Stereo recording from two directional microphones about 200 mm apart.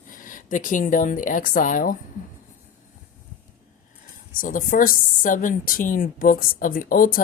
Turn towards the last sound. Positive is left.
turn(degrees=45)  # may be behind; listen again after turning